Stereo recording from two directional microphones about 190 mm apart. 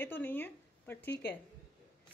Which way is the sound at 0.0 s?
10° left (ahead or behind).